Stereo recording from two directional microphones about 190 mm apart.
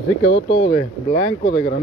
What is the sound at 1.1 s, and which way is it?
Speech, 30° left (ahead or behind).